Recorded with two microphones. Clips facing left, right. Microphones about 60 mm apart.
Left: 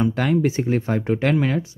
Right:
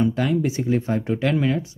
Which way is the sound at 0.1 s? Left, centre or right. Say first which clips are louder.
Left 2 dB; left.